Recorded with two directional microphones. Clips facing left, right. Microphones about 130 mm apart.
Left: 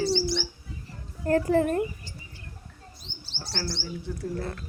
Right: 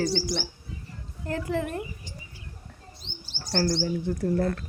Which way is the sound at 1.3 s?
40° left (ahead or behind).